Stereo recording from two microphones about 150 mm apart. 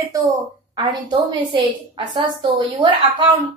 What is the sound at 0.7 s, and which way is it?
A woman's voice, 30° right (ahead or behind).